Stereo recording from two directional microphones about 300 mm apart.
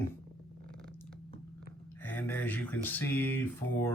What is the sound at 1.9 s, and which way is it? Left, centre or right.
Speech, centre.